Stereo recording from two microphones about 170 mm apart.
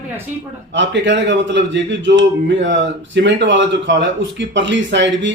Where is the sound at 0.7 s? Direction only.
90° right.